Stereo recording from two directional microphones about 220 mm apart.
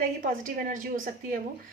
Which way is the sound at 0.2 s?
40° right (ahead or behind).